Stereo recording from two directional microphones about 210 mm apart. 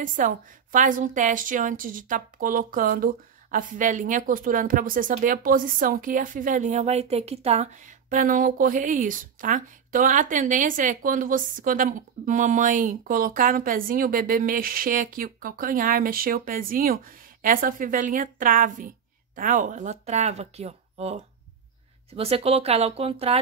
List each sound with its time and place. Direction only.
0.0 s a woman's voice: 40° right (ahead or behind)